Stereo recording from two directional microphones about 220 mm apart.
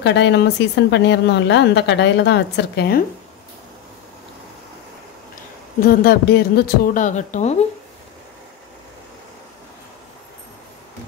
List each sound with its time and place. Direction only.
0.0 s a woman's voice: 50° left (ahead or behind)
5.8 s a woman's voice: 45° left (ahead or behind)